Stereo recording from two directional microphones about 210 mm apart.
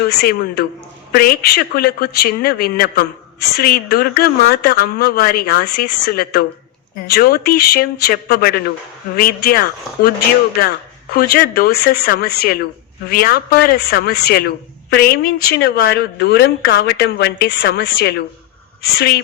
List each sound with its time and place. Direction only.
0.1 s speech: 50° left (ahead or behind)
11.1 s speech: 45° left (ahead or behind)